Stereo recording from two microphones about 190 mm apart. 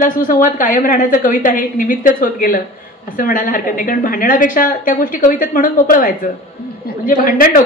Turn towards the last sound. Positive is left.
turn(degrees=45)  # may be behind; listen again after turning